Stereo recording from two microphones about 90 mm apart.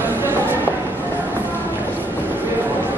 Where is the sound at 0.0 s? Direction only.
25° right (ahead or behind).